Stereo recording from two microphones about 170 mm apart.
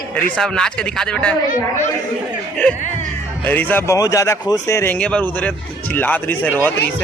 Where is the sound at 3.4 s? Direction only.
10° left (ahead or behind).